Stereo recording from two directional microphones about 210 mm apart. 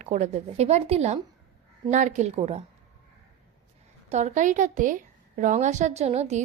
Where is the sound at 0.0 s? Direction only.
35° right (ahead or behind).